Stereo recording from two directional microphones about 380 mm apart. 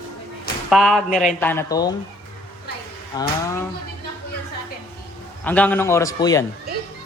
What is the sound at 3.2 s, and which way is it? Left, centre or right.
Speech, centre.